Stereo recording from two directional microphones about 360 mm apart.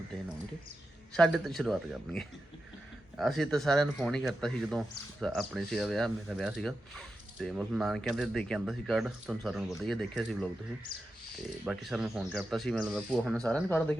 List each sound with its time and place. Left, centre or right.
1.1 s speech: centre
11.6 s speech: centre